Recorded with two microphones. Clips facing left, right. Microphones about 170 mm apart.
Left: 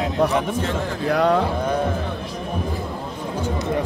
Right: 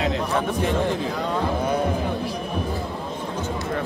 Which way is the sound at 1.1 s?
70° left (ahead or behind).